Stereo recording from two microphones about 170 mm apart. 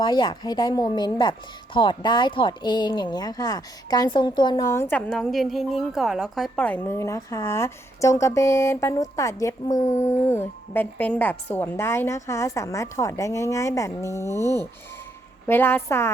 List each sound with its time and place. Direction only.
0.0 s a woman's voice: 25° left (ahead or behind)
15.4 s speech: 15° left (ahead or behind)